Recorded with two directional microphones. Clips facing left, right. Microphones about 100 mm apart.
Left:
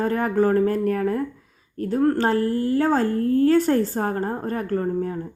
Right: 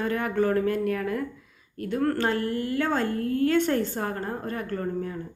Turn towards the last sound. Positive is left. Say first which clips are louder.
# left 6 dB
turn(degrees=40)  # may be behind; listen again after turning